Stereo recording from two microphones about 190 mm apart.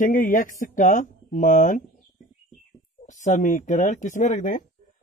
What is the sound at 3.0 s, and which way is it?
A man's voice, 40° left (ahead or behind).